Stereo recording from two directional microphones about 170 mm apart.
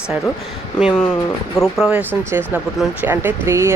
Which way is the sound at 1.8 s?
5° right (ahead or behind).